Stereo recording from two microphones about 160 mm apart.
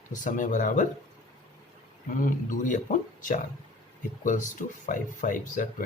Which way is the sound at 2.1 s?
55° left (ahead or behind).